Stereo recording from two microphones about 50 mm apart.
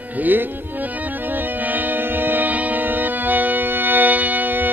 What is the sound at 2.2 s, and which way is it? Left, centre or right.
Music, right.